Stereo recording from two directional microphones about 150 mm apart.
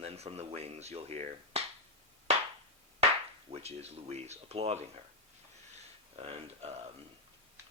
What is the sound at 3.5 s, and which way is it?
Speech, 45° right (ahead or behind).